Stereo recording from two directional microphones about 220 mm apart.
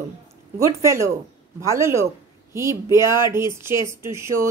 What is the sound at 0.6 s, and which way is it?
Speech, 15° right (ahead or behind).